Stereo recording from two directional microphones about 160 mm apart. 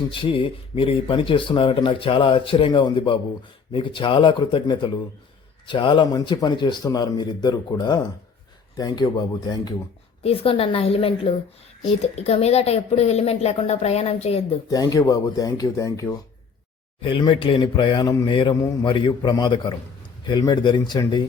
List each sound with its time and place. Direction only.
0.1 s a man's voice: 35° left (ahead or behind)
10.2 s speech: 35° left (ahead or behind)
14.7 s a man's voice: 25° left (ahead or behind)
17.0 s a man's voice: 30° left (ahead or behind)